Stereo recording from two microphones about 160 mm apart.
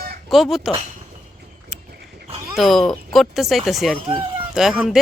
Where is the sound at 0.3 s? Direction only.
Centre (ahead or behind).